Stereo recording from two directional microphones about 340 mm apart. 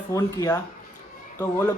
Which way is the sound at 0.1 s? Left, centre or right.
Centre.